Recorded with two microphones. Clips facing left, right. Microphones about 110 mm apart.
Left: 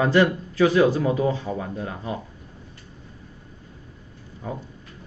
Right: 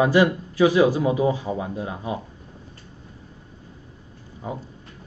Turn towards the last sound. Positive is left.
turn(degrees=-20)  # may be behind; listen again after turning